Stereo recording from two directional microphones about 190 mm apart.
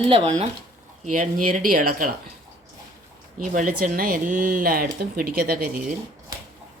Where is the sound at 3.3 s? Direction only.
45° right (ahead or behind).